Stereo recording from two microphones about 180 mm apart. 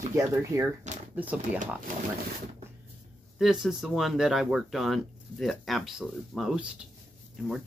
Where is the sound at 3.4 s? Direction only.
Centre (ahead or behind).